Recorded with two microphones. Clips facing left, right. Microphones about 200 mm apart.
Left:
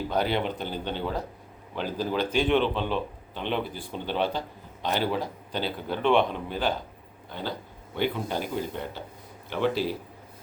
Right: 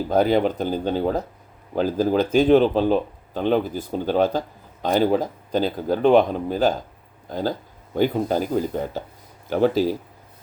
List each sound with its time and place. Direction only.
0.1 s speech: 45° right (ahead or behind)